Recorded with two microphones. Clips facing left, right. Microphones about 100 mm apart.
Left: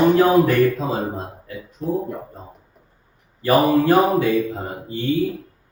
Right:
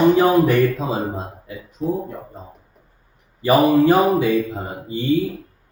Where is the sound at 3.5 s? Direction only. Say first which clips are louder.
Right 2 dB; centre (ahead or behind).